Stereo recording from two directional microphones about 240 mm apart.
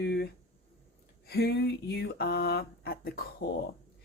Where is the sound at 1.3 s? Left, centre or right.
Left.